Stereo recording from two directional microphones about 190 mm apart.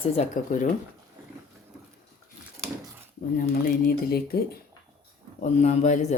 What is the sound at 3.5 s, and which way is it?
Speech, 50° left (ahead or behind).